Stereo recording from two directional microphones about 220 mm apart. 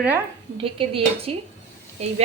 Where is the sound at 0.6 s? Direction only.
25° right (ahead or behind).